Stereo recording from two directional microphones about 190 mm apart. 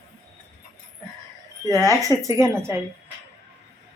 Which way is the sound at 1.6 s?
20° right (ahead or behind).